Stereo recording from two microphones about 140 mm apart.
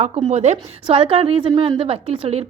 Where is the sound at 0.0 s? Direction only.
55° right (ahead or behind).